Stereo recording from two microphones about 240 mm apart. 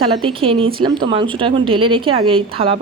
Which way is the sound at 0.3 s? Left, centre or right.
Right.